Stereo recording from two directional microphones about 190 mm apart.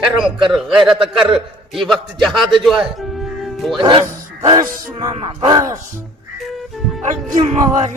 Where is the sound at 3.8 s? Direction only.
25° right (ahead or behind).